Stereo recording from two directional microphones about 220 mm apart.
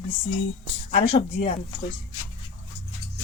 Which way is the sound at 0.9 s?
25° left (ahead or behind).